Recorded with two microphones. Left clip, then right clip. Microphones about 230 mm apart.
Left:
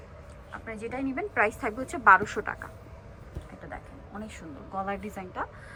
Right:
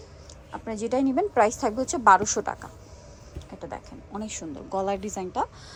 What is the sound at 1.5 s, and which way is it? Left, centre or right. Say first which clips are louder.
A woman's voice: right 6 dB; centre.